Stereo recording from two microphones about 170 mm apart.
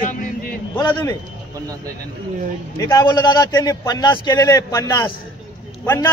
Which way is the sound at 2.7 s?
20° left (ahead or behind).